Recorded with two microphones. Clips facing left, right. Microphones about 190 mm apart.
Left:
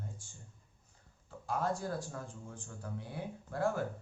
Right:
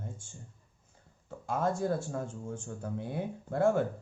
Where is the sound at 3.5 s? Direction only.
25° right (ahead or behind).